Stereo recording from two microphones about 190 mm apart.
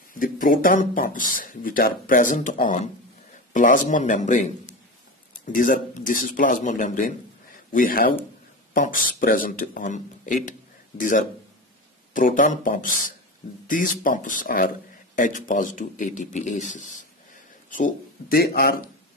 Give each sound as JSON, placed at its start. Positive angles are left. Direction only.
{"t": 0.1, "sound": "speech", "side_deg": 45}